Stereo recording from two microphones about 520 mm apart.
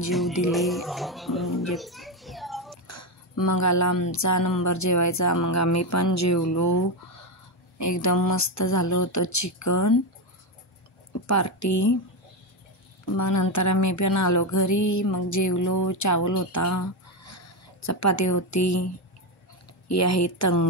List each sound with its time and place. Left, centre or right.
0.5 s music: centre
1.7 s children playing: centre
2.9 s music: left
7.8 s music: left
11.2 s music: left
13.0 s music: left
19.9 s music: left